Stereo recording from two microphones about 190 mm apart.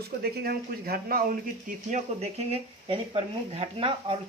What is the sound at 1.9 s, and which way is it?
Speech, 35° right (ahead or behind).